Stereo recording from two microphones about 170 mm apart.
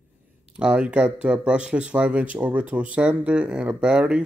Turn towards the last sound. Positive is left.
turn(degrees=-5)  # may be behind; listen again after turning